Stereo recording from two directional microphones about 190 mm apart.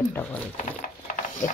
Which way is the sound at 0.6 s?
45° left (ahead or behind).